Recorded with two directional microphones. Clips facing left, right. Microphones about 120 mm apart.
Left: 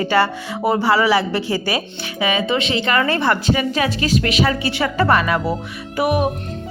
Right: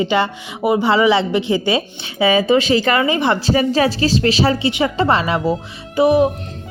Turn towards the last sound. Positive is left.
turn(degrees=-25)  # may be behind; listen again after turning